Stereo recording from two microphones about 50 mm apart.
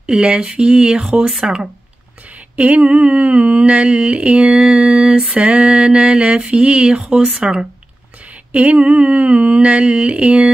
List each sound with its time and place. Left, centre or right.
0.0 s speech: centre
2.5 s mantra: right
8.5 s mantra: right